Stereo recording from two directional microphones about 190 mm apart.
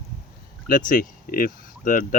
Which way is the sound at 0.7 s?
45° left (ahead or behind).